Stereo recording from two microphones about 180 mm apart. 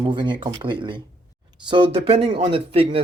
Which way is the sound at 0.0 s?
25° right (ahead or behind).